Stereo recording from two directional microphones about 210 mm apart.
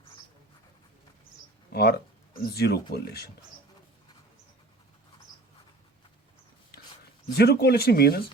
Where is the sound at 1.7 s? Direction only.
50° left (ahead or behind).